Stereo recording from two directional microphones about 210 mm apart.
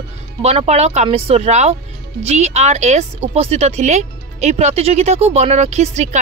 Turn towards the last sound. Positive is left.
turn(degrees=-35)  # may be behind; listen again after turning